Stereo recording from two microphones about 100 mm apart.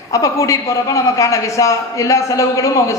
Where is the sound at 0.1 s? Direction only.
30° left (ahead or behind).